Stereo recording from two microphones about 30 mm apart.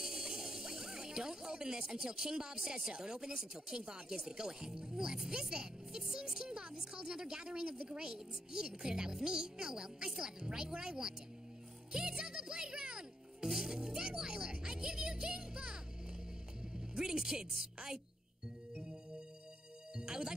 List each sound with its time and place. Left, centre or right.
0.0 s music: right
3.0 s speech: right
6.4 s a sound: right
7.8 s a woman's voice: right
11.9 s music: right
13.5 s music: centre
13.7 s speech: right
20.0 s music: right